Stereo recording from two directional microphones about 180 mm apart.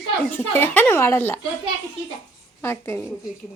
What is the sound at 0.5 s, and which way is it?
Speech, 10° left (ahead or behind).